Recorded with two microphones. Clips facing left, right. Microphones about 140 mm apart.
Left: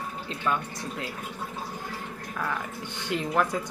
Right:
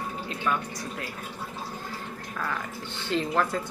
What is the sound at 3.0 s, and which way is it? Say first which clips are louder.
Speech: even; 15° left (ahead or behind).